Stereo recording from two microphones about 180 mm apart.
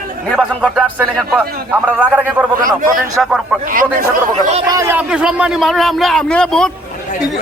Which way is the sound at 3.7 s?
50° right (ahead or behind).